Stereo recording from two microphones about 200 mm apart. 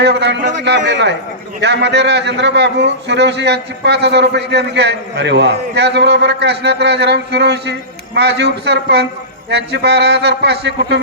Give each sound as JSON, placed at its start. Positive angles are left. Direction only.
{"t": 0.0, "sound": "a man's voice", "side_deg": -60}